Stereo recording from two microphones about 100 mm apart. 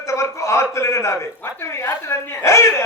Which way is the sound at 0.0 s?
30° left (ahead or behind).